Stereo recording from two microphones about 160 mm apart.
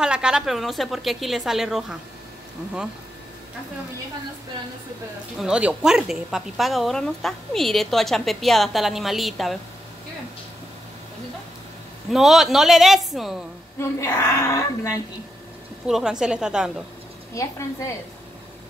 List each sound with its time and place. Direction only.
0.0 s a woman's voice: 5° right (ahead or behind)
5.4 s a woman's voice: 5° right (ahead or behind)
12.1 s a woman's voice: centre (ahead or behind)
13.7 s a woman's voice: 20° left (ahead or behind)
15.9 s a woman's voice: 5° right (ahead or behind)
17.3 s a woman's voice: 20° left (ahead or behind)